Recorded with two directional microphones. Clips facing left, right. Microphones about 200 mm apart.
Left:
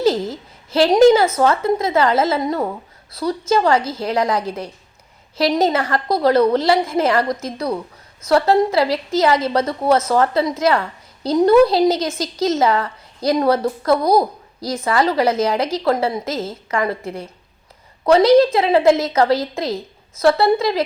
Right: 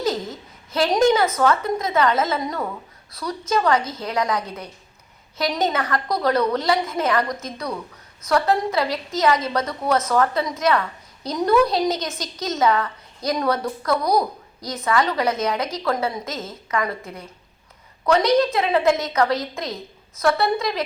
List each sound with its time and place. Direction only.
0.0 s a woman's voice: 30° left (ahead or behind)